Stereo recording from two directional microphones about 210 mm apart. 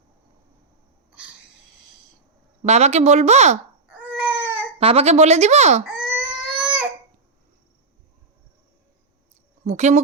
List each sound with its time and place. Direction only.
2.6 s speech: 30° right (ahead or behind)
3.9 s baby cry: 5° right (ahead or behind)
4.8 s speech: 25° right (ahead or behind)
5.8 s crying: 5° right (ahead or behind)
9.6 s speech: 35° right (ahead or behind)